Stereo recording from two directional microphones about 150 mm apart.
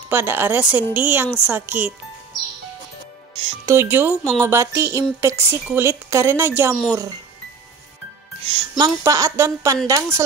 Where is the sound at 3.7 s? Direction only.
15° right (ahead or behind).